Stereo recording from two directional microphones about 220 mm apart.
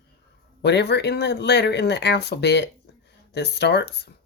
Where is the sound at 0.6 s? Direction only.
50° left (ahead or behind).